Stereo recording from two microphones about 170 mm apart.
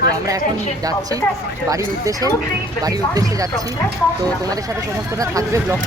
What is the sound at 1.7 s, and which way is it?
Speech, 20° right (ahead or behind).